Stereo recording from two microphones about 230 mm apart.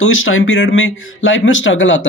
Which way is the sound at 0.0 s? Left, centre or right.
Left.